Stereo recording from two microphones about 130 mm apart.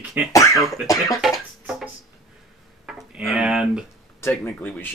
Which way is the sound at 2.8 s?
5° right (ahead or behind).